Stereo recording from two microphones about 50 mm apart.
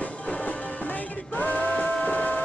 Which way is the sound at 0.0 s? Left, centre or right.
Left.